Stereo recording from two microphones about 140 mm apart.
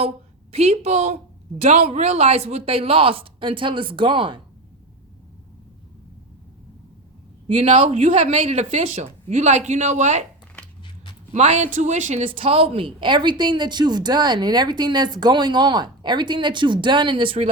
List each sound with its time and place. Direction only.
0.5 s a woman's voice: 45° right (ahead or behind)
7.4 s speech: 40° right (ahead or behind)
7.9 s speech: 60° right (ahead or behind)
11.3 s a woman's voice: 55° right (ahead or behind)